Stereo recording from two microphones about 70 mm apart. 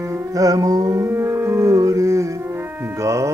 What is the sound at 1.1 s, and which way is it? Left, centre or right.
Music, right.